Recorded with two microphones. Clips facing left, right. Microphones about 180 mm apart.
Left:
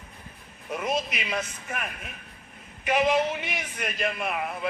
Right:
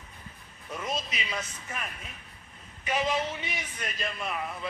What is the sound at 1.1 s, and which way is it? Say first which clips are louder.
A man's voice: left 5 dB; 65° left (ahead or behind).